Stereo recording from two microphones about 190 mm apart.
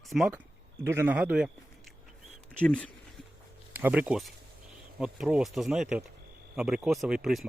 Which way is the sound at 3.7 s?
10° right (ahead or behind).